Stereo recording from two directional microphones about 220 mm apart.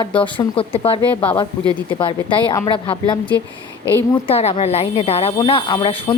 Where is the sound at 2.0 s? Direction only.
20° left (ahead or behind).